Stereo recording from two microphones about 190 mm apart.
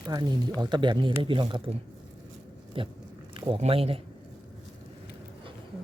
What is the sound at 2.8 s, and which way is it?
Speech, 25° right (ahead or behind).